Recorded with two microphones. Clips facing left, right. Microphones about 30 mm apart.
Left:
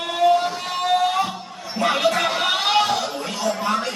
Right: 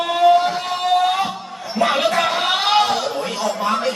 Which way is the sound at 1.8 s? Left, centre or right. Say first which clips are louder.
Right 2 dB; centre.